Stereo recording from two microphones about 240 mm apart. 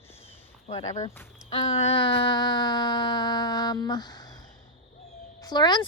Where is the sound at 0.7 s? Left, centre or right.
Left.